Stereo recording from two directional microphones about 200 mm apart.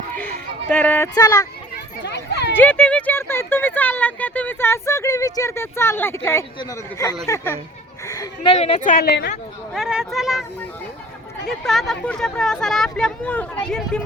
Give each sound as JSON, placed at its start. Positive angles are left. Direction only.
{"t": 0.7, "sound": "speech", "side_deg": 10}
{"t": 2.0, "sound": "a sound", "side_deg": 60}
{"t": 2.5, "sound": "speech", "side_deg": 10}
{"t": 8.0, "sound": "a sound", "side_deg": 15}
{"t": 8.4, "sound": "speech", "side_deg": 30}
{"t": 9.7, "sound": "speech", "side_deg": 0}
{"t": 11.4, "sound": "speech", "side_deg": 0}